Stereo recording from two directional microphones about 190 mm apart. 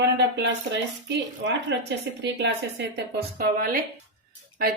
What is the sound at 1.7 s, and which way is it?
A woman's voice, 70° right (ahead or behind).